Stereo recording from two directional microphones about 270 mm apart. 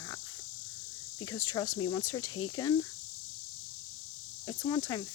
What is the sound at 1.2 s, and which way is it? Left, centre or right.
Speech, centre.